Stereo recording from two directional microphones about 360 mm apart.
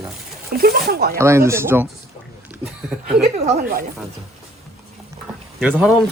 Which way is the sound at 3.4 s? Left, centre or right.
Right.